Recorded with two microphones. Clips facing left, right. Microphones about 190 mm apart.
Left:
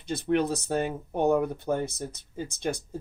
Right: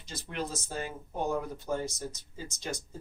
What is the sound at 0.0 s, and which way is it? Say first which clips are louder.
Speech: left 12 dB; 60° left (ahead or behind).